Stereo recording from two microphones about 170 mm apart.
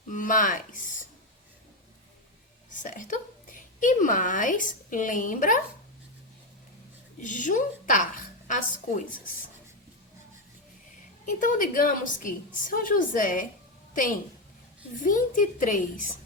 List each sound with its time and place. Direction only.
0.1 s speech: 50° left (ahead or behind)
2.6 s a woman's voice: 50° left (ahead or behind)
7.2 s a woman's voice: 50° left (ahead or behind)
11.3 s a woman's voice: 50° left (ahead or behind)